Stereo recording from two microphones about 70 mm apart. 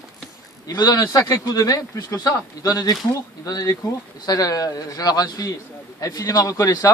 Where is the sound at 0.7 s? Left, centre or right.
Left.